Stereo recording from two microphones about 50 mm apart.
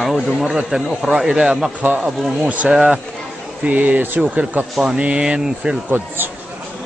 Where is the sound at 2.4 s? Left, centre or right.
Right.